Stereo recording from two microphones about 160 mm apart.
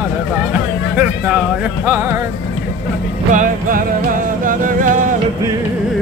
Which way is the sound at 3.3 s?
55° right (ahead or behind).